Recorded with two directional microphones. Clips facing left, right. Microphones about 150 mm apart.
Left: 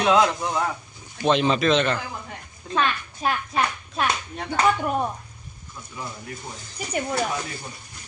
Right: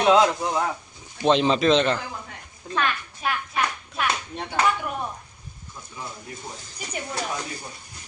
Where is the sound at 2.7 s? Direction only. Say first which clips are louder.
Left 2 dB; 30° left (ahead or behind).